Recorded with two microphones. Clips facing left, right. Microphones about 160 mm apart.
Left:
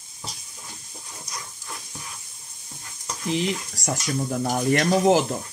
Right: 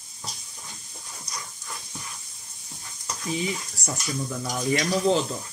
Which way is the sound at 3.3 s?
80° left.